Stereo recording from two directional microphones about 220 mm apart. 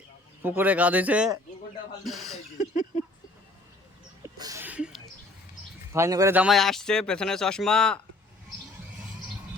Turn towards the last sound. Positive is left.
turn(degrees=5)  # may be behind; listen again after turning